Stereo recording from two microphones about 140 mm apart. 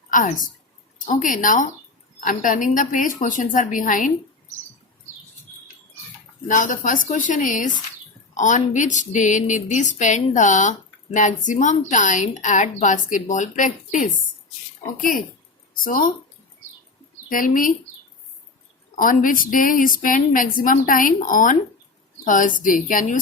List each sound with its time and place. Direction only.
0.1 s a woman's voice: 70° left (ahead or behind)
6.5 s a woman's voice: 70° left (ahead or behind)
15.8 s speech: 80° left
17.2 s a woman's voice: 75° left (ahead or behind)
18.9 s a woman's voice: 75° left (ahead or behind)